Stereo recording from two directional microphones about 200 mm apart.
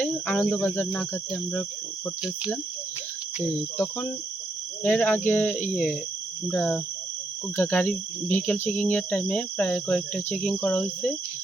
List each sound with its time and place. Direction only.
0.0 s speech: 5° left (ahead or behind)
3.8 s speech: 5° left (ahead or behind)